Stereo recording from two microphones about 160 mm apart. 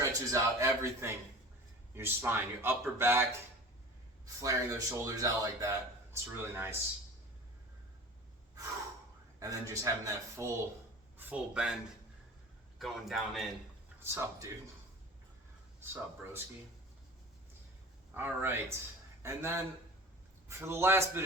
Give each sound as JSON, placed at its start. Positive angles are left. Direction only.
{"t": 0.0, "sound": "speech", "side_deg": -20}
{"t": 4.4, "sound": "speech", "side_deg": -20}
{"t": 9.4, "sound": "speech", "side_deg": -20}
{"t": 11.2, "sound": "a man's voice", "side_deg": -10}
{"t": 12.8, "sound": "a man's voice", "side_deg": 0}
{"t": 14.0, "sound": "speech", "side_deg": -15}
{"t": 15.8, "sound": "speech", "side_deg": -15}
{"t": 18.1, "sound": "speech", "side_deg": -15}